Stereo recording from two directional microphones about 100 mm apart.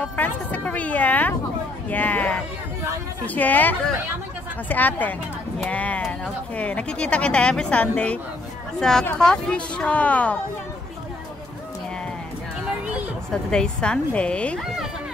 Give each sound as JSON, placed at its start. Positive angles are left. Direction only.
{"t": 0.0, "sound": "speech", "side_deg": 15}
{"t": 13.3, "sound": "speech", "side_deg": 10}